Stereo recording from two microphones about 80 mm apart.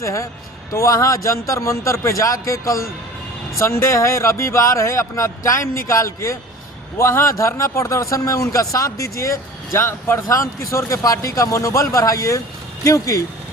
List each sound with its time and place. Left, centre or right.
0.0 s a man's voice: left